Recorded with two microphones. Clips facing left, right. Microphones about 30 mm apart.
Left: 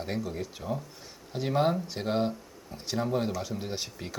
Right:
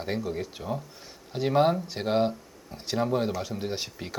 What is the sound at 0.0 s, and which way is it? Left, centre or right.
Speech, centre.